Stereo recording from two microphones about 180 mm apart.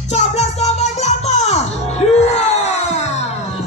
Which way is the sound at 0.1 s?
40° left (ahead or behind).